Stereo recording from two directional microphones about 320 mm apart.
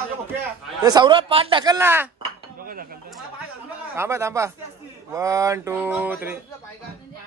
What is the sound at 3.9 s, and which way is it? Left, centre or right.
Speech, centre.